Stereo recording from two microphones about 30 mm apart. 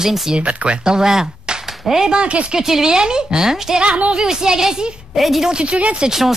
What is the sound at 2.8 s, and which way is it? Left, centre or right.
Speech, right.